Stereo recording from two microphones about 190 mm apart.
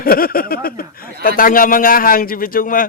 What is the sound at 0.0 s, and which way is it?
A man's voice, 50° left (ahead or behind).